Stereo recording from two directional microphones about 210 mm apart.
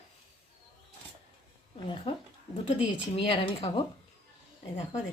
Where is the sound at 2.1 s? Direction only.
25° left (ahead or behind).